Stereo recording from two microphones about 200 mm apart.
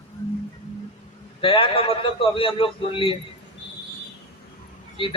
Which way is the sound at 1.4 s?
25° left (ahead or behind).